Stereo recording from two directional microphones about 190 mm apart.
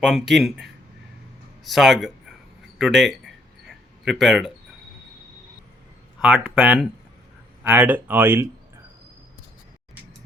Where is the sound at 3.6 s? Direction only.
Centre (ahead or behind).